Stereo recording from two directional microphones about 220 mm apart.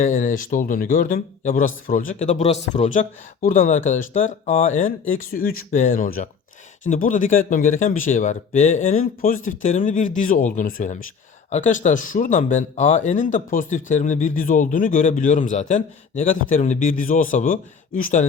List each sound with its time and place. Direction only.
0.0 s speech: 35° left (ahead or behind)